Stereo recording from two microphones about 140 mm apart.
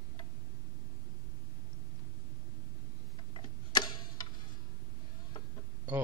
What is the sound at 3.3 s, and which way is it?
Tick-tock, 30° left (ahead or behind).